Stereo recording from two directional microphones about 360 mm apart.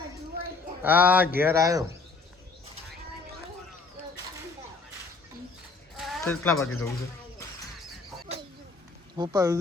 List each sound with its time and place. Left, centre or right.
0.8 s speech: centre
6.0 s a sound: centre
6.5 s speech: left
9.1 s speech: centre